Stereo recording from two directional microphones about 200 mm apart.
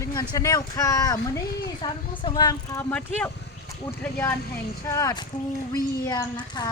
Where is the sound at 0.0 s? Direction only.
20° left (ahead or behind).